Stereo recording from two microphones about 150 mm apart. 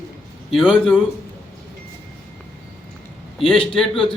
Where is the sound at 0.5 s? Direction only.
5° right (ahead or behind).